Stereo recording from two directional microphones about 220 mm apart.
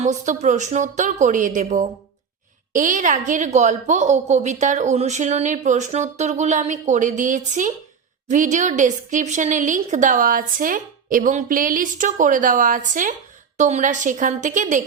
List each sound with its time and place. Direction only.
0.0 s a woman's voice: 35° right (ahead or behind)